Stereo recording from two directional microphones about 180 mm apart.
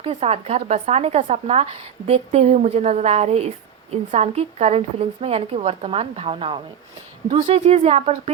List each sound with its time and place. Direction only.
0.0 s speech: 35° right (ahead or behind)